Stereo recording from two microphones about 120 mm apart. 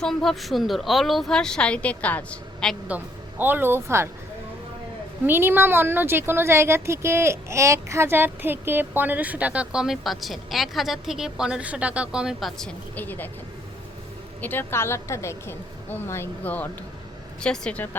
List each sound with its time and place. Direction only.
0.0 s a woman's voice: 5° left (ahead or behind)
2.8 s speech: 15° right (ahead or behind)
5.2 s speech: 15° right (ahead or behind); by 12.7 s centre (ahead or behind)
13.0 s a woman's voice: 15° left (ahead or behind)
14.4 s a woman's voice: 20° left (ahead or behind)